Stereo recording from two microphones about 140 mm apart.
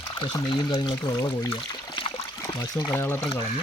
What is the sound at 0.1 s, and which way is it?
Pour, 35° left (ahead or behind).